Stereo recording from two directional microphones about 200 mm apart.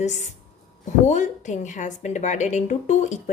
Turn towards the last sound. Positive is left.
turn(degrees=35)  # may be behind; listen again after turning